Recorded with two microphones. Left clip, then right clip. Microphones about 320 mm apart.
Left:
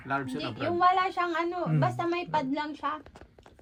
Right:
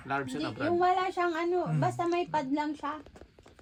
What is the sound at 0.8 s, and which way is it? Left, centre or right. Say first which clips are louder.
A woman's voice: left 4 dB; left.